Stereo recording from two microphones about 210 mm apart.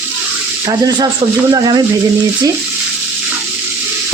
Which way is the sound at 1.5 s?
20° right (ahead or behind).